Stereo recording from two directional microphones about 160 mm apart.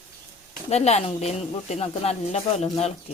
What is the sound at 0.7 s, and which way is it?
Speech, 40° left (ahead or behind).